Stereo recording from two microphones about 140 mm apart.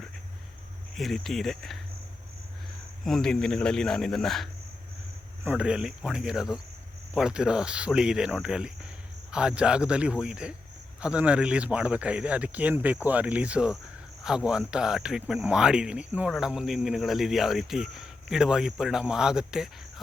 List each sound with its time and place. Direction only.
0.9 s speech: centre (ahead or behind)
3.0 s speech: 5° left (ahead or behind)
5.5 s speech: 5° right (ahead or behind)